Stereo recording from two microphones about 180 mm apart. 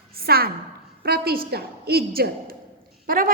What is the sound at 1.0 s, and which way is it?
A woman's voice, 55° right (ahead or behind).